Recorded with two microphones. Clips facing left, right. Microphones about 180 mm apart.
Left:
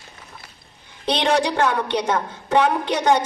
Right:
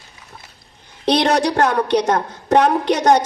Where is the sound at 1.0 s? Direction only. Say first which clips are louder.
Right 4 dB; 40° right (ahead or behind).